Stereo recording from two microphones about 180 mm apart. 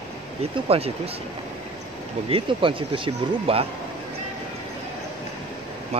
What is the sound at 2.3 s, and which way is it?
Speech, 30° right (ahead or behind).